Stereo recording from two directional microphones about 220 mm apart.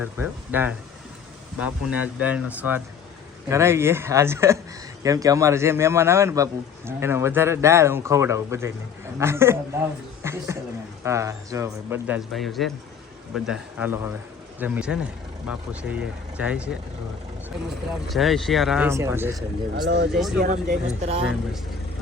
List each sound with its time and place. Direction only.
0.0 s a man's voice: 10° right (ahead or behind)
18.1 s speech: centre (ahead or behind)
19.7 s speech: 55° right (ahead or behind)
20.1 s speech: centre (ahead or behind)
20.4 s speech: 35° right (ahead or behind)